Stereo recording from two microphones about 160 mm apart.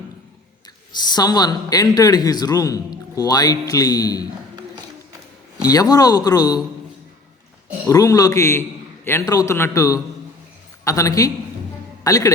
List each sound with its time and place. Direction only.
0.9 s speech: 25° left (ahead or behind)
5.7 s speech: 20° left (ahead or behind)
7.9 s speech: 20° left (ahead or behind)